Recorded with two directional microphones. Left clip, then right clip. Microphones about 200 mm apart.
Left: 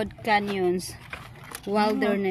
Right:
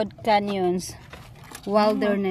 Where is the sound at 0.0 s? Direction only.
55° right (ahead or behind).